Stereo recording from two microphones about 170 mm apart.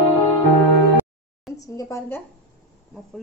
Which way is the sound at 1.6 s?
20° left (ahead or behind).